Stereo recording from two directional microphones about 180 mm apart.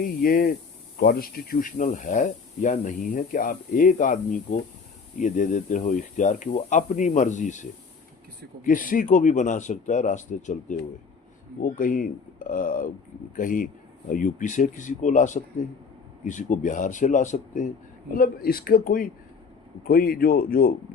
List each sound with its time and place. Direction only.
0.2 s speech: 55° left (ahead or behind)
18.1 s speech: 55° left (ahead or behind)